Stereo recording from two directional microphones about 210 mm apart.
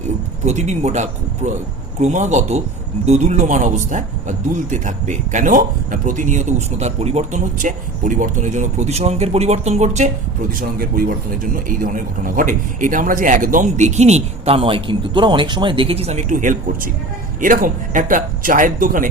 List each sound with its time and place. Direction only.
0.4 s speech: 35° right (ahead or behind)